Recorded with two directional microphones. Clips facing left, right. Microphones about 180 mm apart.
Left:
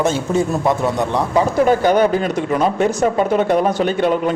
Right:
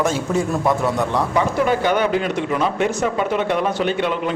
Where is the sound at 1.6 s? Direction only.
40° left (ahead or behind).